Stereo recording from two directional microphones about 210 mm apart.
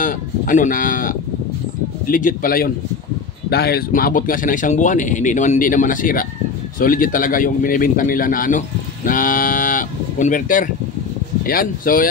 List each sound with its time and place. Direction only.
0.0 s a man's voice: 40° left (ahead or behind)